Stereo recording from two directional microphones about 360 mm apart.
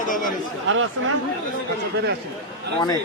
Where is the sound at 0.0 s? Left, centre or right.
Left.